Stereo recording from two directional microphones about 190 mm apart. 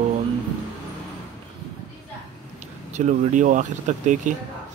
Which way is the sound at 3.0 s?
40° right (ahead or behind).